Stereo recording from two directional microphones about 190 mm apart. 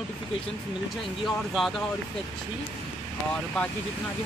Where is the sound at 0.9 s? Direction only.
Centre (ahead or behind).